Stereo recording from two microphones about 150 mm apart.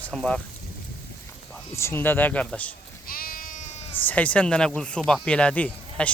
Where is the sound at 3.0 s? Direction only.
75° left (ahead or behind); by 4.1 s 40° left (ahead or behind).